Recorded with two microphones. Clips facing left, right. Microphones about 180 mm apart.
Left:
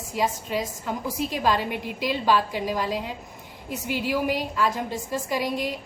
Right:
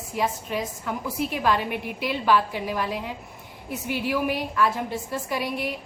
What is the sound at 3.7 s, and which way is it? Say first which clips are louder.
A woman's voice: even; 15° left (ahead or behind).